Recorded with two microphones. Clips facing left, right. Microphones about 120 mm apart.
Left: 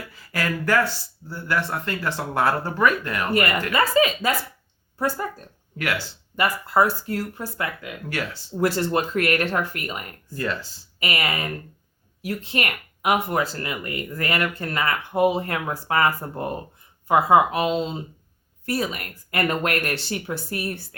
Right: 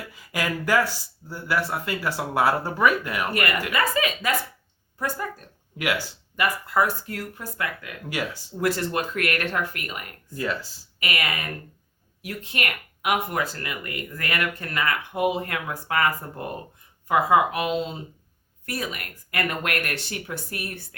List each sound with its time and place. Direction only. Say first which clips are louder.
0.2 s speech: left 1 dB; 15° right (ahead or behind)
3.7 s speech: left 5 dB; 30° left (ahead or behind)
5.7 s speech: right 1 dB; 15° right (ahead or behind)
6.3 s speech: left 2 dB; 30° left (ahead or behind)
8.1 s speech: right 1 dB; 15° right (ahead or behind)
8.6 s speech: left 3 dB; 30° left (ahead or behind)
10.3 s speech: left 1 dB; 5° right (ahead or behind)
11.0 s speech: left 3 dB; 30° left (ahead or behind)